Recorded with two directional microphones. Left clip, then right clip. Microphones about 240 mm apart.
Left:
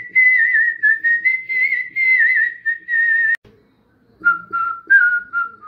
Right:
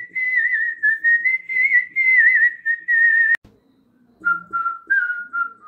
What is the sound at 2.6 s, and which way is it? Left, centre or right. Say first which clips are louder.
Whistling: right 1 dB; left.